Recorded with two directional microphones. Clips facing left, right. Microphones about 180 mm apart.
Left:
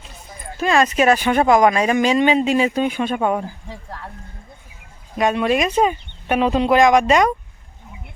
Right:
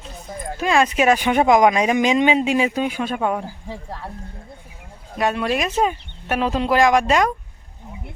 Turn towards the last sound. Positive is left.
turn(degrees=0)  # may be behind; listen again after turning